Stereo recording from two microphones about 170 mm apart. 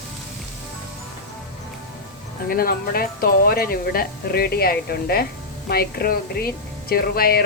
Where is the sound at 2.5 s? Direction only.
60° left (ahead or behind).